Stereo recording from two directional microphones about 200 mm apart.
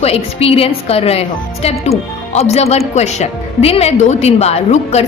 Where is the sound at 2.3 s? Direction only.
30° left (ahead or behind).